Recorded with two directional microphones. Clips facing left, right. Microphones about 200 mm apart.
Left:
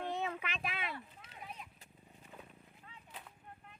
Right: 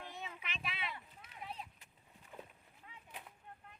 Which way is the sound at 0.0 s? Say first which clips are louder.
Left 10 dB; 65° left (ahead or behind).